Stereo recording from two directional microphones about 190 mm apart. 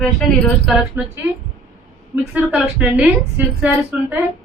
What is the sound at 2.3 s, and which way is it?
A woman's voice, 5° right (ahead or behind).